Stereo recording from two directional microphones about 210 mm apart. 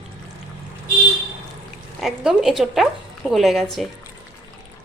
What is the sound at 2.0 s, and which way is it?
A woman's voice, centre (ahead or behind).